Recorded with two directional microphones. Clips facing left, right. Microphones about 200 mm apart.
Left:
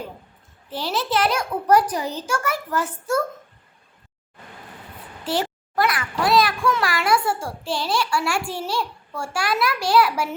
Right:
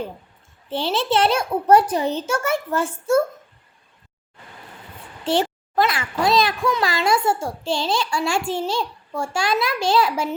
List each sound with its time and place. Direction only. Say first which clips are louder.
0.7 s a child's voice: right 3 dB; 25° right (ahead or behind)
5.2 s a child's voice: right 4 dB; 25° right (ahead or behind)